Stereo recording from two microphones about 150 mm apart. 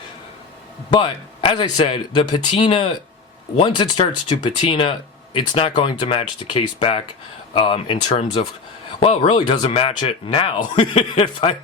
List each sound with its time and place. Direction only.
0.9 s speech: 35° left (ahead or behind)
4.3 s speech: 35° left (ahead or behind)